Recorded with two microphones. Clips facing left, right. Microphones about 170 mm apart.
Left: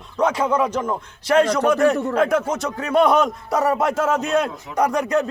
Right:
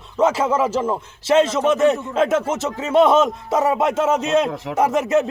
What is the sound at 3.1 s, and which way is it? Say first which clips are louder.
A man's voice: right 2 dB; 25° right (ahead or behind).